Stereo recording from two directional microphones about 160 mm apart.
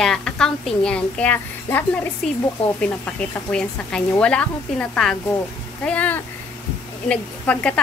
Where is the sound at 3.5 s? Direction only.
5° left (ahead or behind).